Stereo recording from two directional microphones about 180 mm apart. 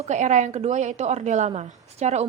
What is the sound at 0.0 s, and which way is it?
A woman's voice, 40° right (ahead or behind).